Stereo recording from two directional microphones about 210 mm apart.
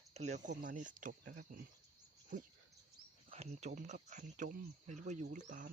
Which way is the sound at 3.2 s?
30° right (ahead or behind).